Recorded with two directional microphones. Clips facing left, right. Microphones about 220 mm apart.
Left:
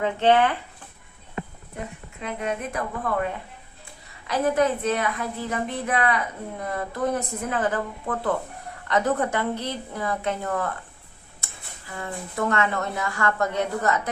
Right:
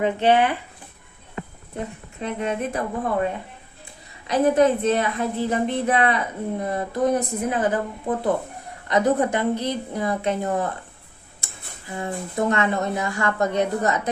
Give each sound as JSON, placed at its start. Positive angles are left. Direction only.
{"t": 0.0, "sound": "a woman's voice", "side_deg": -15}
{"t": 2.2, "sound": "speech", "side_deg": -30}
{"t": 4.3, "sound": "a woman's voice", "side_deg": -20}
{"t": 11.9, "sound": "speech", "side_deg": -25}